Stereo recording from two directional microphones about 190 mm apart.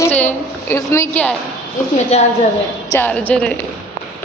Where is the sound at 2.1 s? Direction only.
35° left (ahead or behind).